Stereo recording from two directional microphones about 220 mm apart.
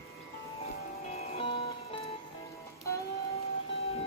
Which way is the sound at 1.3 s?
25° left (ahead or behind).